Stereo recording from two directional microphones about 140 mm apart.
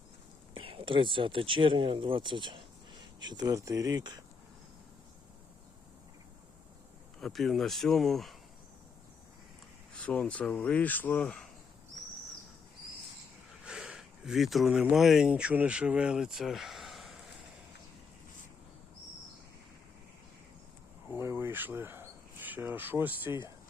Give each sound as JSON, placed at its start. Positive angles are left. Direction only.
{"t": 0.5, "sound": "speech", "side_deg": -40}
{"t": 7.2, "sound": "speech", "side_deg": 0}
{"t": 9.9, "sound": "speech", "side_deg": 10}
{"t": 13.7, "sound": "speech", "side_deg": -5}
{"t": 21.1, "sound": "cricket", "side_deg": -15}